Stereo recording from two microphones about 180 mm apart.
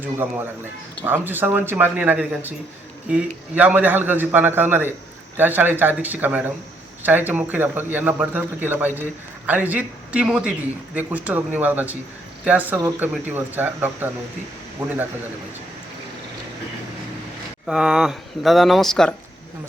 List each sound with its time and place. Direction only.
0.0 s a man's voice: 10° right (ahead or behind)
3.5 s a man's voice: 10° right (ahead or behind)
17.7 s speech: 5° right (ahead or behind)